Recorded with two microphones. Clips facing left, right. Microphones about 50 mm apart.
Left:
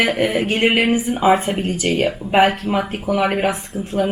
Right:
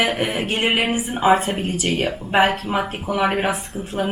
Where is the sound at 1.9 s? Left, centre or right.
Centre.